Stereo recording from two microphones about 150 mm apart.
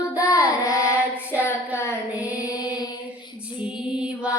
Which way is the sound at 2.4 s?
25° left (ahead or behind).